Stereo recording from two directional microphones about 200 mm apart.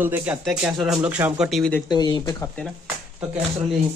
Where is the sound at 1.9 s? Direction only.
20° left (ahead or behind).